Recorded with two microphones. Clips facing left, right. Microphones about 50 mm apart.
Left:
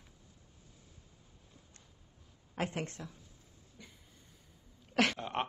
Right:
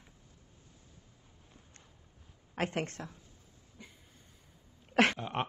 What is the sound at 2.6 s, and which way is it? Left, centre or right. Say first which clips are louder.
Speech: right 3 dB; right.